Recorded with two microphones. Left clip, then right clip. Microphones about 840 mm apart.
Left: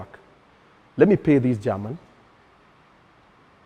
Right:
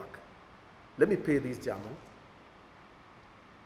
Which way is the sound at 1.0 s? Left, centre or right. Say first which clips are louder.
Left 10 dB; left.